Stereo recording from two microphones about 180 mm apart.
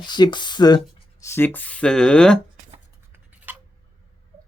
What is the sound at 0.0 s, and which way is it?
Speech, 25° left (ahead or behind).